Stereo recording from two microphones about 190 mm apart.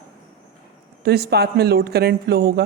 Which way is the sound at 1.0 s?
55° right (ahead or behind).